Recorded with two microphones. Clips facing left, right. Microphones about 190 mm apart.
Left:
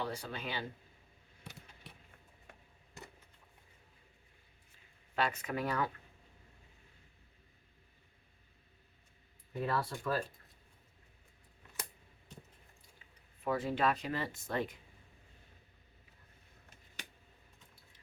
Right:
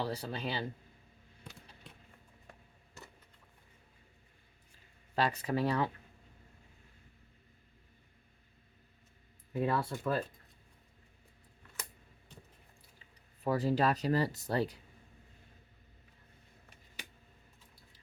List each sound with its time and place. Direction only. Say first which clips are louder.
0.0 s speech: right 3 dB; 35° right (ahead or behind)
5.1 s speech: right 3 dB; 35° right (ahead or behind)
9.6 s speech: right 3 dB; 20° right (ahead or behind)
13.4 s speech: right 3 dB; 35° right (ahead or behind)